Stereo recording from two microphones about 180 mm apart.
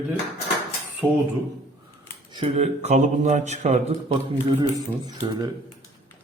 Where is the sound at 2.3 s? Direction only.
30° right (ahead or behind).